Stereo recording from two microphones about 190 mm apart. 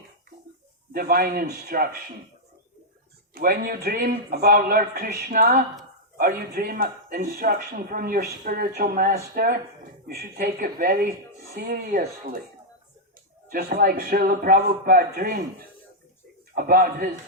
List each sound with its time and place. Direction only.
0.9 s speech: 55° right (ahead or behind)
3.3 s speech: 50° right (ahead or behind)
13.5 s speech: 55° right (ahead or behind)
16.6 s speech: 50° right (ahead or behind)